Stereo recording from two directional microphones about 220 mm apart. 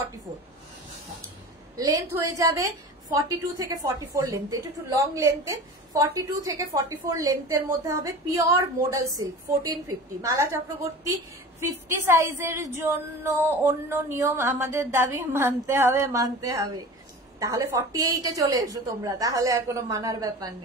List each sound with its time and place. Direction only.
1.8 s a woman's voice: 15° right (ahead or behind)
11.6 s a woman's voice: 10° right (ahead or behind)